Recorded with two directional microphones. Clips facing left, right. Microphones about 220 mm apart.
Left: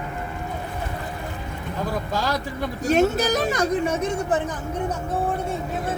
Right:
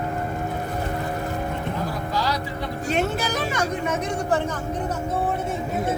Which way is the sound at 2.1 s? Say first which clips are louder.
Right 1 dB; 50° left (ahead or behind).